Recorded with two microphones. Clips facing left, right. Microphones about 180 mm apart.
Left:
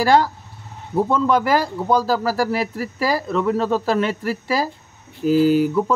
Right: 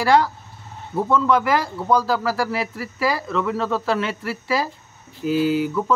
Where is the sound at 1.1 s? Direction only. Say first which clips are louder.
Even; 35° left (ahead or behind).